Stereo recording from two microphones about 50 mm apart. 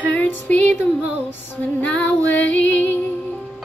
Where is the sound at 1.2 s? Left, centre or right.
Left.